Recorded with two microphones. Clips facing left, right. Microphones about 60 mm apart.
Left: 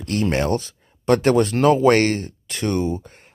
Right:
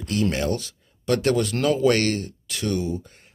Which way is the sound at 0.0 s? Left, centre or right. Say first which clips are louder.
Left 3 dB; left.